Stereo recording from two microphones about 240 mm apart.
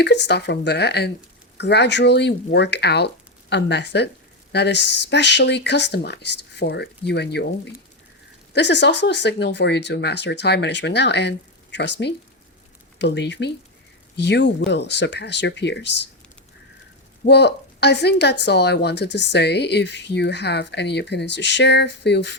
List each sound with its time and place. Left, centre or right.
0.0 s speech: left
17.2 s speech: left